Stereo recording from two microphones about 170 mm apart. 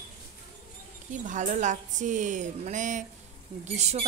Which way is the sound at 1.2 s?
45° right (ahead or behind).